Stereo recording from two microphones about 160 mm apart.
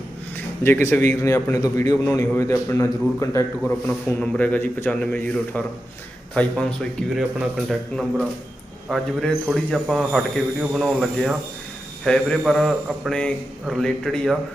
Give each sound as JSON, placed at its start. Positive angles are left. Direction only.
{"t": 0.3, "sound": "a man's voice", "side_deg": 15}
{"t": 3.6, "sound": "a man's voice", "side_deg": 5}